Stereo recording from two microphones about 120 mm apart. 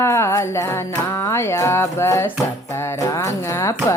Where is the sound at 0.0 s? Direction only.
25° left (ahead or behind).